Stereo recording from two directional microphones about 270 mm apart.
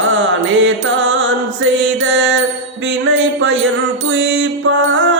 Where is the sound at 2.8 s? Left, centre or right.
Right.